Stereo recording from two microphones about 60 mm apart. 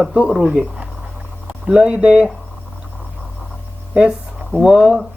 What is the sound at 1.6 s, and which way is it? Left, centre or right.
Speech, centre.